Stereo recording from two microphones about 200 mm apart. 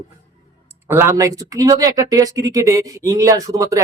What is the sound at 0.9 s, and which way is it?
Speech, 10° right (ahead or behind).